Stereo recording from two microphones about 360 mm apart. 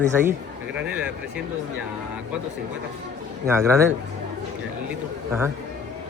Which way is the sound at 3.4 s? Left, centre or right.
Centre.